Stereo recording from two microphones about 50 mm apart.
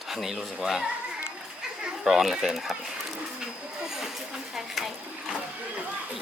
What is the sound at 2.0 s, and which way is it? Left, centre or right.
Speech, centre.